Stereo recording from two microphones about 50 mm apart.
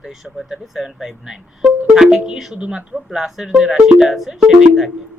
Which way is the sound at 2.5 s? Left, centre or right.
Right.